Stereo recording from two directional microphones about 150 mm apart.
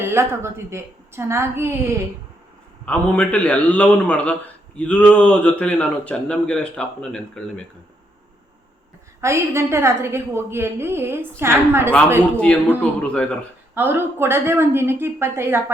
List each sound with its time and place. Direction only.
0.0 s a woman's voice: 15° right (ahead or behind)
2.8 s a man's voice: 10° left (ahead or behind)
9.2 s a woman's voice: 20° right (ahead or behind)
12.2 s a man's voice: 10° left (ahead or behind)
13.7 s a woman's voice: 15° right (ahead or behind)